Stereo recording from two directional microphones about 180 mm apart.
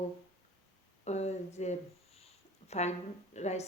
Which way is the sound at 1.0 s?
40° left (ahead or behind).